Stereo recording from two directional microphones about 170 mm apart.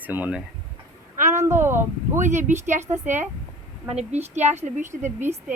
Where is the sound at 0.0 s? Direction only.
10° right (ahead or behind).